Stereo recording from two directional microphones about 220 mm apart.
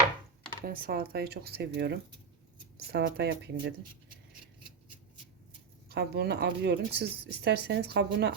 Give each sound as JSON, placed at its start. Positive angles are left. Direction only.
{"t": 0.6, "sound": "speech", "side_deg": -40}
{"t": 5.9, "sound": "speech", "side_deg": -50}